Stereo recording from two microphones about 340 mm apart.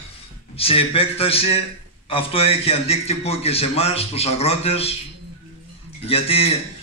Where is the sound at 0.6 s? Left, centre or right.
Centre.